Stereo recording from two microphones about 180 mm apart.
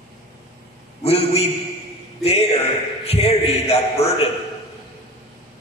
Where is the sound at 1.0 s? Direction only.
35° left (ahead or behind).